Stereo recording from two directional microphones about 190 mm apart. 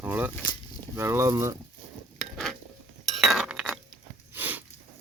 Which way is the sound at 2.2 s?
Centre (ahead or behind).